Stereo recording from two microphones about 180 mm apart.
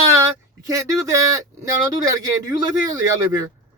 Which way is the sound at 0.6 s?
20° right (ahead or behind).